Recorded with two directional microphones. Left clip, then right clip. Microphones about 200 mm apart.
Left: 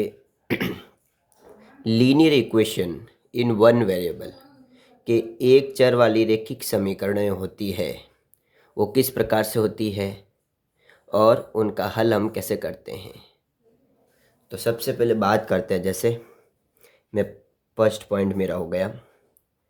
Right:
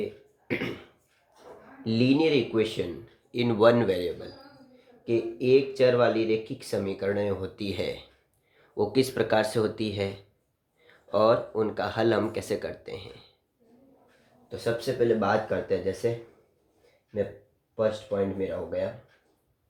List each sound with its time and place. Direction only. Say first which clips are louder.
1.8 s speech: left 6 dB; 40° left (ahead or behind)
14.4 s speech: left 4 dB; 55° left (ahead or behind)
18.3 s speech: left 6 dB; 55° left (ahead or behind)